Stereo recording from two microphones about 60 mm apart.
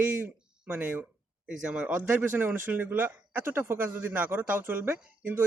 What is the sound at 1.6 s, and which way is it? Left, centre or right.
Speech, right.